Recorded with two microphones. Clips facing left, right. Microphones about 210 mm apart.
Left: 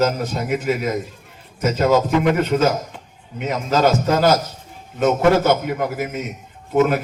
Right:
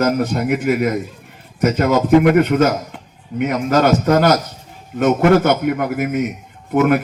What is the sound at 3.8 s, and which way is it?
A man's voice, 60° right (ahead or behind).